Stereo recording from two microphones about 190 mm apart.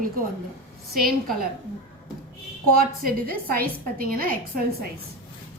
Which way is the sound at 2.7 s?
50° right (ahead or behind).